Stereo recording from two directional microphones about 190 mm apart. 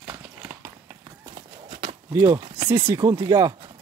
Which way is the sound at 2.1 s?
20° right (ahead or behind).